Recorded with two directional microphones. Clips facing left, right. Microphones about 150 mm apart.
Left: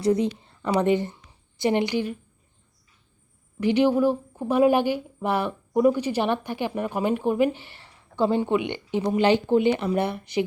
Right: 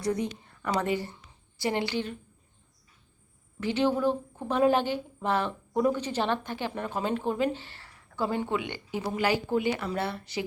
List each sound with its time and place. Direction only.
0.0 s speech: 25° left (ahead or behind)
0.3 s a sound: 20° left (ahead or behind)
0.8 s a woman's voice: 20° left (ahead or behind)
3.6 s a woman's voice: 15° left (ahead or behind)